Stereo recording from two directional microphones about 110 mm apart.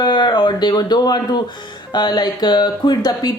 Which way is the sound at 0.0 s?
45° left (ahead or behind).